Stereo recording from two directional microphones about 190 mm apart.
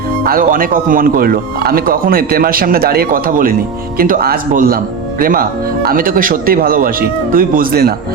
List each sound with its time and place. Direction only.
0.3 s speech: 50° right (ahead or behind)